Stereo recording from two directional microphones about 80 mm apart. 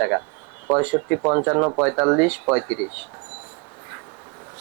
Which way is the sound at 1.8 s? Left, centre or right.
Centre.